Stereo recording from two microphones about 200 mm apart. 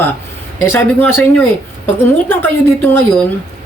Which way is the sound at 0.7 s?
10° left (ahead or behind).